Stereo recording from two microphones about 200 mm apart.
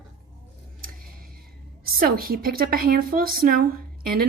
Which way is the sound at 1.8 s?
50° right (ahead or behind).